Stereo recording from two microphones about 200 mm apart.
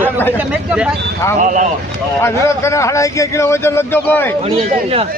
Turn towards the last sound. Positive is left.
turn(degrees=10)  # may be behind; listen again after turning